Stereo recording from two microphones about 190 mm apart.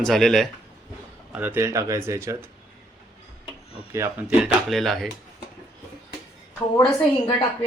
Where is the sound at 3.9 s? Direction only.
15° right (ahead or behind).